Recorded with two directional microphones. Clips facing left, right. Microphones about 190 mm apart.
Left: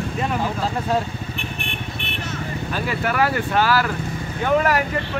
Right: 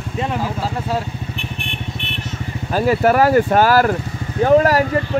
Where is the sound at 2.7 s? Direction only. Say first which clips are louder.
Right 11 dB; 40° right (ahead or behind).